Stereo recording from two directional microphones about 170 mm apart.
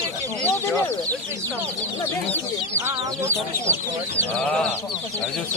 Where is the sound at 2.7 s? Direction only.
15° right (ahead or behind).